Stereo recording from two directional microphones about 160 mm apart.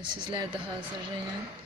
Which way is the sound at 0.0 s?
30° right (ahead or behind).